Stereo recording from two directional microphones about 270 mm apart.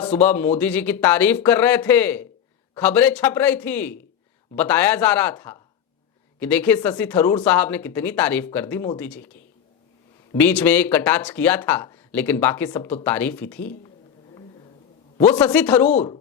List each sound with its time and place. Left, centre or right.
0.1 s speech: centre
10.3 s speech: centre
15.2 s speech: centre
15.9 s speech: left